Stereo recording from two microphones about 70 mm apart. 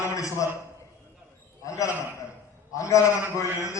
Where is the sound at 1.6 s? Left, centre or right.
Left.